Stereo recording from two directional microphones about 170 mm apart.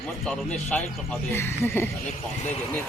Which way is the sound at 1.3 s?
15° left (ahead or behind).